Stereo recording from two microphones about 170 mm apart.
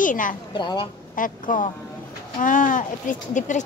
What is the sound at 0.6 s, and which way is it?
Speech, 25° left (ahead or behind).